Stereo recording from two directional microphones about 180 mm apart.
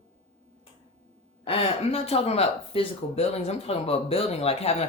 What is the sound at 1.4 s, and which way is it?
Speech, 30° left (ahead or behind).